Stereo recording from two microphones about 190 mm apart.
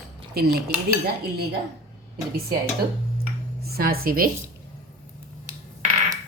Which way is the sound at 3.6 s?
55° right (ahead or behind).